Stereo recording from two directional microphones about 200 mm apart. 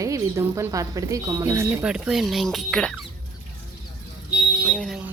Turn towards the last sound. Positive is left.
turn(degrees=5)  # may be behind; listen again after turning